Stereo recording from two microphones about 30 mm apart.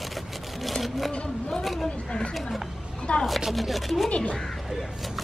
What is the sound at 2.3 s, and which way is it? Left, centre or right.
Speech, centre.